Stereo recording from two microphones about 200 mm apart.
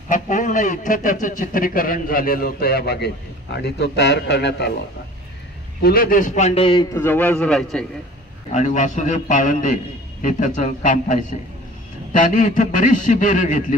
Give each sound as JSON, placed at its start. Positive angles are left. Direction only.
{"t": 0.1, "sound": "a man's voice", "side_deg": 40}
{"t": 5.8, "sound": "a man's voice", "side_deg": 50}
{"t": 6.9, "sound": "a man's voice", "side_deg": 10}
{"t": 8.5, "sound": "a man's voice", "side_deg": 35}